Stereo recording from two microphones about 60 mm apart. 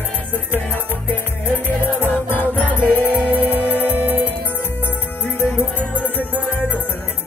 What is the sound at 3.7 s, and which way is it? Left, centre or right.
Music, right.